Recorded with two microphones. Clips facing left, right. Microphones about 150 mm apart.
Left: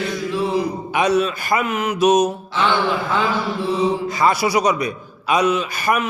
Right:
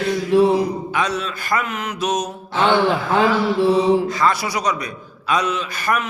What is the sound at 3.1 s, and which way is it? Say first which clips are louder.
Mantra: right 4 dB; 70° right (ahead or behind).